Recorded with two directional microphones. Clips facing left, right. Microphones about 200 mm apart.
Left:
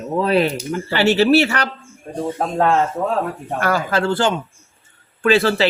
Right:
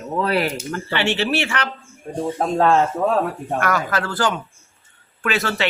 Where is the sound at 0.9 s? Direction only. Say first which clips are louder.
Left 8 dB; 40° left (ahead or behind).